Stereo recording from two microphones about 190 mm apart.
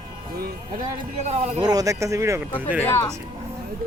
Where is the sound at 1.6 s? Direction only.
20° right (ahead or behind).